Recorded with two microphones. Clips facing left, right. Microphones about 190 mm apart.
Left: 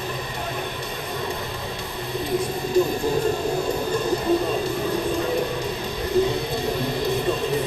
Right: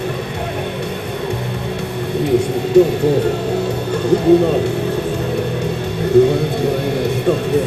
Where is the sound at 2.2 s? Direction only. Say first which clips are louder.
Right 9 dB; 70° right (ahead or behind).